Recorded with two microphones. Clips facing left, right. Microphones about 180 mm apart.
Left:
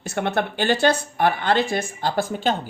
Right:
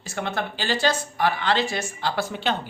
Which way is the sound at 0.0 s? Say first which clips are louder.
Left 5 dB; 65° left (ahead or behind).